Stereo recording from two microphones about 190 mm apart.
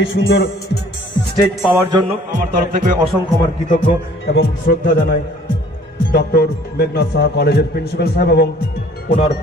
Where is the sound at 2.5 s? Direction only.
45° right (ahead or behind).